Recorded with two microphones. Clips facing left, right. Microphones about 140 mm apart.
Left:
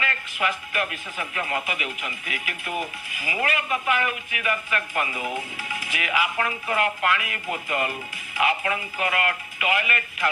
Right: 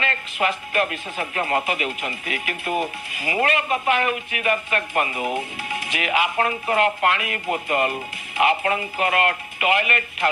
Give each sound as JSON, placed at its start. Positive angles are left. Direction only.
{"t": 0.0, "sound": "speech", "side_deg": -30}
{"t": 1.2, "sound": "speech", "side_deg": -45}
{"t": 1.6, "sound": "speech", "side_deg": -30}